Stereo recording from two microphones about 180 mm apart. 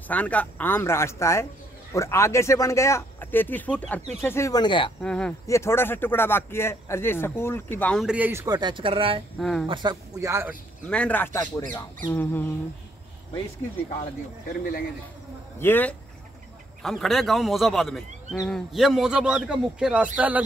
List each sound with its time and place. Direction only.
0.1 s speech: 10° left (ahead or behind); by 4.9 s 25° left (ahead or behind)
5.0 s speech: 5° left (ahead or behind); by 9.2 s 30° right (ahead or behind)
9.4 s speech: centre (ahead or behind)
9.7 s speech: 25° right (ahead or behind)
10.2 s speech: 10° right (ahead or behind)
10.9 s speech: 10° left (ahead or behind)
15.6 s speech: 10° left (ahead or behind); by 20.4 s 10° right (ahead or behind)